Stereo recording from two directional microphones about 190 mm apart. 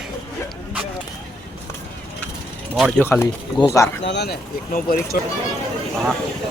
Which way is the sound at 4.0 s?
65° left (ahead or behind).